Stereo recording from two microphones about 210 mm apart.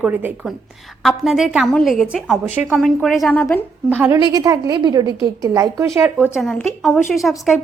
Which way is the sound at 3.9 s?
10° right (ahead or behind).